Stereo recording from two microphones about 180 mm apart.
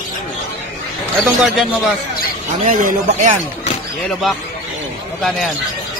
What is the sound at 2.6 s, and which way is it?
Speech, 45° right (ahead or behind).